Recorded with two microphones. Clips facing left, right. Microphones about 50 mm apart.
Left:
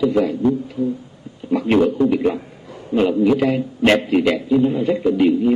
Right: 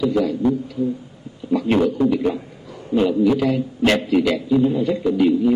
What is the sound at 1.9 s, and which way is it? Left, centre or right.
A man's voice, left.